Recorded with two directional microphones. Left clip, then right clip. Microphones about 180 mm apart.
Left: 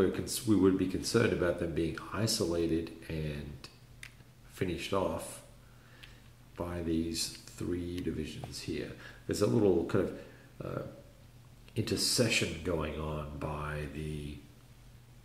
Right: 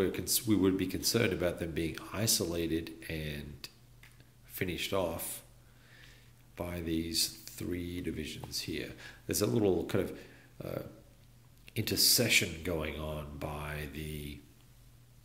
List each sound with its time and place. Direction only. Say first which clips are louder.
0.0 s speech: left 1 dB; 25° right (ahead or behind)
6.5 s speech: left 1 dB; 25° right (ahead or behind)
11.7 s speech: right 3 dB; 25° right (ahead or behind)